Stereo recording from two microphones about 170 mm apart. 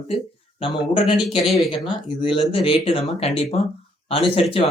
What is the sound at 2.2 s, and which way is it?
Speech, 30° left (ahead or behind).